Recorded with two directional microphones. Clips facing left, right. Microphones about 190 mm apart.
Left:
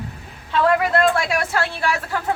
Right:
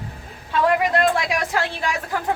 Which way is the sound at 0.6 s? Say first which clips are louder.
Left 1 dB; 15° right (ahead or behind).